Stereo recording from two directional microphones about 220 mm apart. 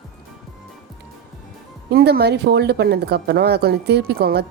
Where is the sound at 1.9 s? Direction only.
45° right (ahead or behind).